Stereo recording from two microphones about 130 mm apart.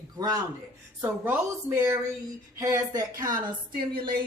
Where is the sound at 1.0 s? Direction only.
15° right (ahead or behind).